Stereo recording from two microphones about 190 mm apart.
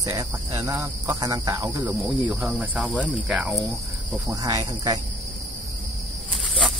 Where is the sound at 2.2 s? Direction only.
5° right (ahead or behind).